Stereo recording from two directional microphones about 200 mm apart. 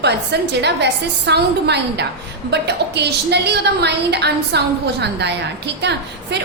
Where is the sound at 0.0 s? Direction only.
55° right (ahead or behind).